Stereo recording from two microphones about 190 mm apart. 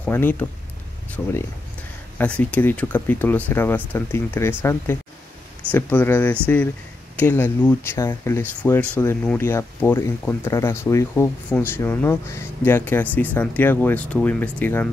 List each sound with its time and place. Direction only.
0.0 s speech: 10° left (ahead or behind)